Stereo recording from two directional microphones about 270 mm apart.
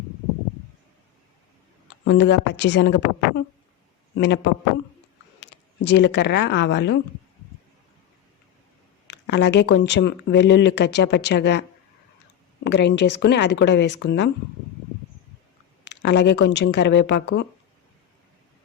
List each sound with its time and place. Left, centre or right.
2.0 s speech: left
9.0 s speech: left
12.6 s speech: left
15.9 s speech: left